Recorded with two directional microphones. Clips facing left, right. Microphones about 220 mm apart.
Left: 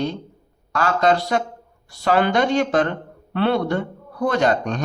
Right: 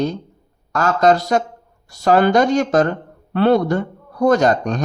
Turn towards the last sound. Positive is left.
turn(degrees=-40)  # may be behind; listen again after turning